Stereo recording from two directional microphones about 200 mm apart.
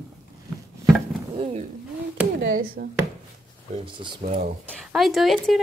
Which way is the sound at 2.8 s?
50° right (ahead or behind).